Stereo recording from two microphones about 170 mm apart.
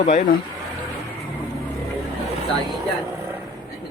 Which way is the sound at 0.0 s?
45° left (ahead or behind).